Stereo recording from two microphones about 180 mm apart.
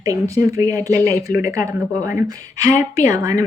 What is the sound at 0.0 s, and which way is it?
Speech, 20° right (ahead or behind).